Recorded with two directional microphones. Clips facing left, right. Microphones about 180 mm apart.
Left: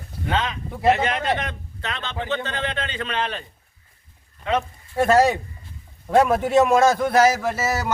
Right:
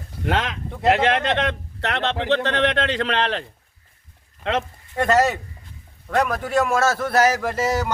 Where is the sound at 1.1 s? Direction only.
75° right (ahead or behind).